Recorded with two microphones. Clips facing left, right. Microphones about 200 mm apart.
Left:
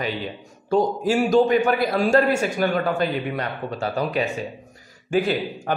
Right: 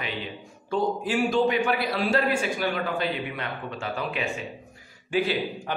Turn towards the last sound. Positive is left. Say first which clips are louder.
# left 4 dB
turn(degrees=45)  # may be behind; listen again after turning